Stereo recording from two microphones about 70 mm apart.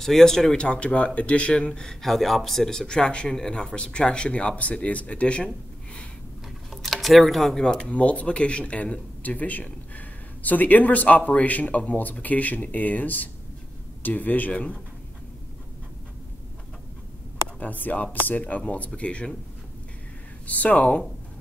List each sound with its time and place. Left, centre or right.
0.0 s speech: centre
6.7 s speech: centre
17.6 s speech: left
20.4 s speech: left